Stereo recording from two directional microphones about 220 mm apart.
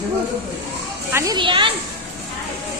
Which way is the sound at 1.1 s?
15° right (ahead or behind).